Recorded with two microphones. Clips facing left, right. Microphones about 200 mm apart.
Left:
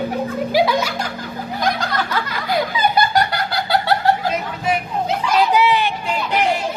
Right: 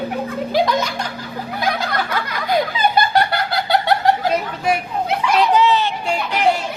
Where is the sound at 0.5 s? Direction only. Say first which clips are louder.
Left 1 dB; 5° left (ahead or behind).